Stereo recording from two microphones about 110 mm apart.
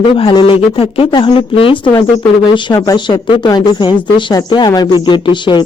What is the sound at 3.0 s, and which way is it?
Speech, 45° left (ahead or behind).